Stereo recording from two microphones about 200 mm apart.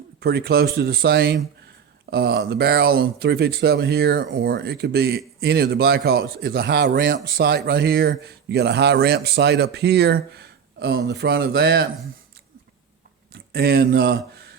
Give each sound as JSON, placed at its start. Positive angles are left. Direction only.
{"t": 0.2, "sound": "a man's voice", "side_deg": -55}
{"t": 13.3, "sound": "speech", "side_deg": -50}